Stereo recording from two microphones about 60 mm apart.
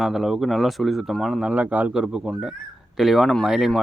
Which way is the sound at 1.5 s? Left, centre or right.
Centre.